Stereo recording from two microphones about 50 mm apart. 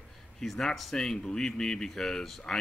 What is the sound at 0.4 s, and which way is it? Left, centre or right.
Speech, centre.